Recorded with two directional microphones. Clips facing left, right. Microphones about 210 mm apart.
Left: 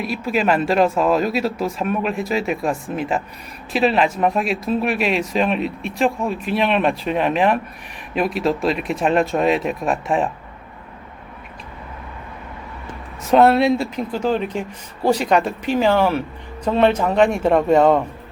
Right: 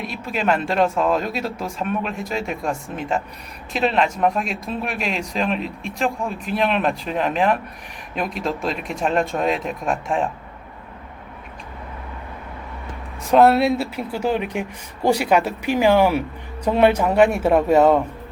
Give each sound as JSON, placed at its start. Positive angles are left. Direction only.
{"t": 0.0, "sound": "speech", "side_deg": 5}
{"t": 13.3, "sound": "a man's voice", "side_deg": 0}